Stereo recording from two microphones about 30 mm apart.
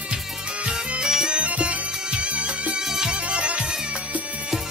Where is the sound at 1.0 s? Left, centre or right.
Centre.